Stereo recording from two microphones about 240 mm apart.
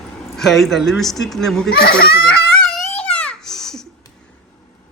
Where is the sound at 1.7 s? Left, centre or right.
Left.